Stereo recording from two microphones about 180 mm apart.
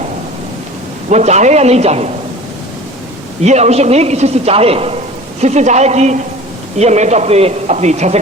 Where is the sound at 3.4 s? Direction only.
40° right (ahead or behind).